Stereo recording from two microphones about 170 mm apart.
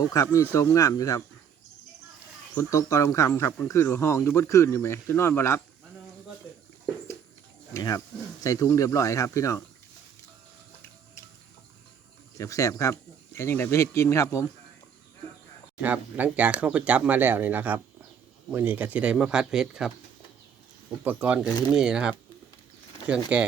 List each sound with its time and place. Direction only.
0.0 s speech: 20° left (ahead or behind)
2.6 s speech: 20° left (ahead or behind)
7.7 s speech: 20° left (ahead or behind)
12.4 s speech: 20° left (ahead or behind)
15.8 s speech: 10° right (ahead or behind)
21.0 s speech: 10° right (ahead or behind)